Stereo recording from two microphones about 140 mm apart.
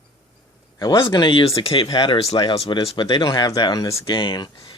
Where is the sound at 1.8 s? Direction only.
30° left (ahead or behind).